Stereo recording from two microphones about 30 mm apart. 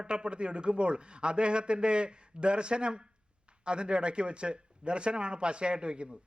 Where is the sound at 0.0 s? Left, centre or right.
Right.